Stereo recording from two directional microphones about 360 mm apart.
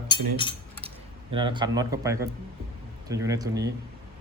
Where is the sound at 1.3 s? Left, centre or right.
Centre.